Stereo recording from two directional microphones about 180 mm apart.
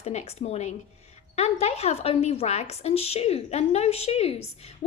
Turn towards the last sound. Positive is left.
turn(degrees=35)  # may be behind; listen again after turning